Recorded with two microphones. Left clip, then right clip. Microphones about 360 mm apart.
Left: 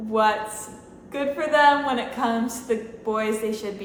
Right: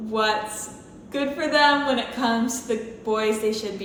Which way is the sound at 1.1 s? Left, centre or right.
Centre.